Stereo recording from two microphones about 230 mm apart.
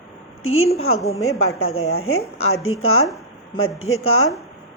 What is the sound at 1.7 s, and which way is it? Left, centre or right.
A woman's voice, left.